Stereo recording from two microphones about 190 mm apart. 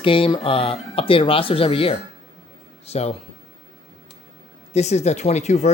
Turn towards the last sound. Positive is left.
turn(degrees=35)  # may be behind; listen again after turning